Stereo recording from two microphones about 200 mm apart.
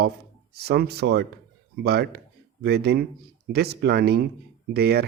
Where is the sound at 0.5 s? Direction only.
50° right (ahead or behind).